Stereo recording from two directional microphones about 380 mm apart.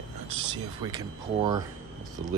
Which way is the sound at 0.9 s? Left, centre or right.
Centre.